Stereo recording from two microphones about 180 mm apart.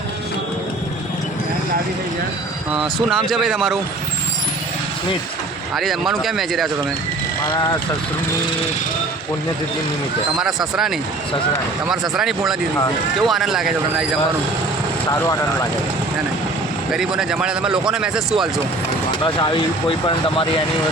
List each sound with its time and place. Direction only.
3.2 s speech: centre (ahead or behind)
5.7 s speech: centre (ahead or behind)
10.3 s speech: centre (ahead or behind)
16.9 s speech: 5° right (ahead or behind)
19.2 s speech: 25° left (ahead or behind)